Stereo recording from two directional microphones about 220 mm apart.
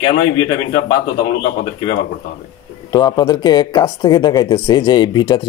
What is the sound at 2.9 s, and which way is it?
Speech, 20° left (ahead or behind).